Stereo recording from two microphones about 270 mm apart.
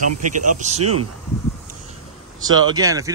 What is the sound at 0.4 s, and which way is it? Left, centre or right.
Speech, right.